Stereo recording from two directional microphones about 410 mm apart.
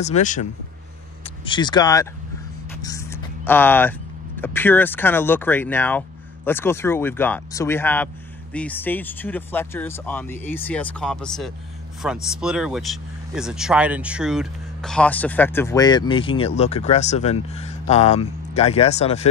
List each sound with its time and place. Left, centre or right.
0.0 s speech: centre
2.8 s vehicle: centre
4.4 s speech: centre